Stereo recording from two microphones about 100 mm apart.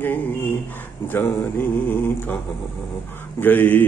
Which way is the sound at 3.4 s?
20° left (ahead or behind).